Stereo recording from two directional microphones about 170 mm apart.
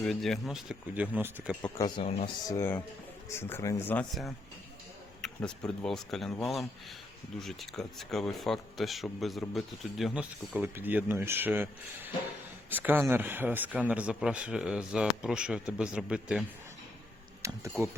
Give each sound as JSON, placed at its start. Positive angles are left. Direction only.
{"t": 0.0, "sound": "speech", "side_deg": 0}
{"t": 2.0, "sound": "speech", "side_deg": 35}
{"t": 2.5, "sound": "speech", "side_deg": 15}
{"t": 5.2, "sound": "speech", "side_deg": 5}
{"t": 12.7, "sound": "speech", "side_deg": -10}
{"t": 17.4, "sound": "speech", "side_deg": -20}